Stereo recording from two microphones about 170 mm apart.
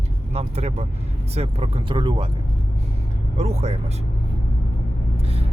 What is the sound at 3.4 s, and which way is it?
Speech, 40° right (ahead or behind).